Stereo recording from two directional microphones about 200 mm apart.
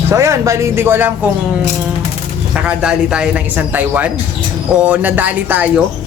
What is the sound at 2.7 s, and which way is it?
Speech, 5° right (ahead or behind).